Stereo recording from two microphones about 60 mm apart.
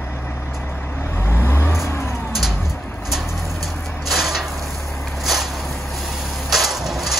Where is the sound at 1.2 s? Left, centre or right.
Left.